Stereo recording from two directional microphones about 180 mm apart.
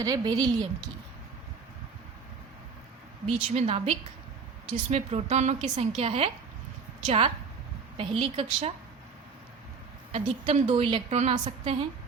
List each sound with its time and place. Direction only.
0.0 s speech: 20° right (ahead or behind)
3.2 s a woman's voice: 35° right (ahead or behind)
10.1 s a woman's voice: 35° right (ahead or behind)